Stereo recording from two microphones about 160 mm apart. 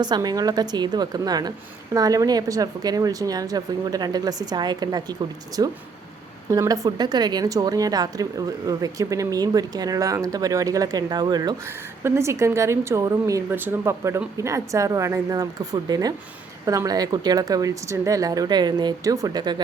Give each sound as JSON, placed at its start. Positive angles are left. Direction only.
{"t": 0.0, "sound": "a woman's voice", "side_deg": -25}